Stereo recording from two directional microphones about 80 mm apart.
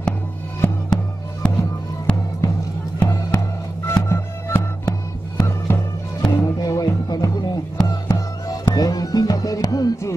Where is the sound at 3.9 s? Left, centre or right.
Left.